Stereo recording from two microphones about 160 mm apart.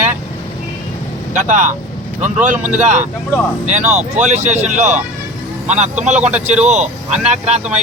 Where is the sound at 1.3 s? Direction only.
50° right (ahead or behind).